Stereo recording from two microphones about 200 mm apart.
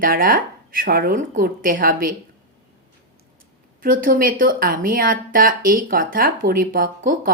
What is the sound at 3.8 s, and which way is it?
A woman's voice, 45° right (ahead or behind).